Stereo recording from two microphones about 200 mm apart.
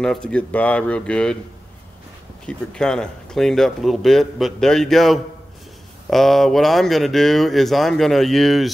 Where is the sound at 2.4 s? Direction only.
5° left (ahead or behind).